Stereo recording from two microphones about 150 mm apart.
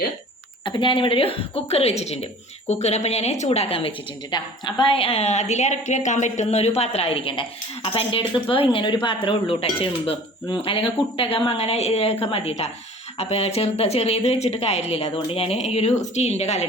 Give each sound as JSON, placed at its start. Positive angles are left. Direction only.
{"t": 0.6, "sound": "a woman's voice", "side_deg": 35}